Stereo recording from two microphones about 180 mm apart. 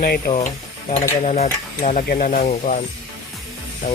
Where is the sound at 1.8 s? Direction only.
40° left (ahead or behind).